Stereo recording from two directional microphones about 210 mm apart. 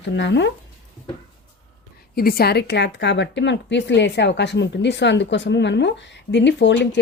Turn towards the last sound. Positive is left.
turn(degrees=55)  # may be behind; listen again after turning